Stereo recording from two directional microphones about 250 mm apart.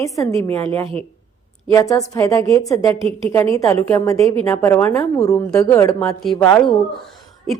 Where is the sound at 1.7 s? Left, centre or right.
Centre.